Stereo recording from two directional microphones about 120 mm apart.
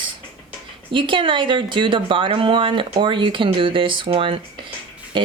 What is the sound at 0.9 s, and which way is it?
Speech, 45° right (ahead or behind).